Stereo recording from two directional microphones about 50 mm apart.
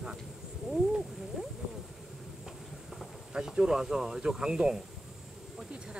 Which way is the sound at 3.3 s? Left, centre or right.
Centre.